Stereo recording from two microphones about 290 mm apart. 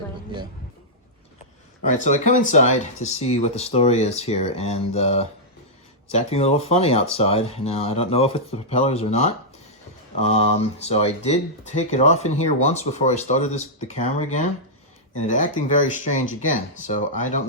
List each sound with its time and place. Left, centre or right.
1.9 s speech: left